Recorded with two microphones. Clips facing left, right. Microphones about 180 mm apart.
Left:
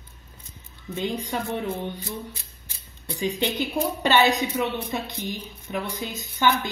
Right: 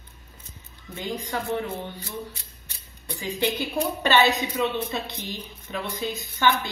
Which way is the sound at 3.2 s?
20° left (ahead or behind).